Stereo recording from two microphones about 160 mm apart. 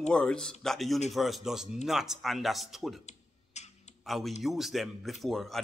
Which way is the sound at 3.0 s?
45° left (ahead or behind).